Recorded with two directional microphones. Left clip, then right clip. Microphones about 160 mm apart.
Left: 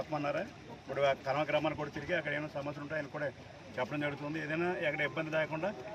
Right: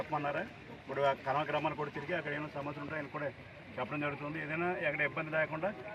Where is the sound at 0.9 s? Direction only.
40° left (ahead or behind).